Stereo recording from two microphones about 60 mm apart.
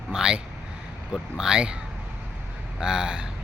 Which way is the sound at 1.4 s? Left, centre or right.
Centre.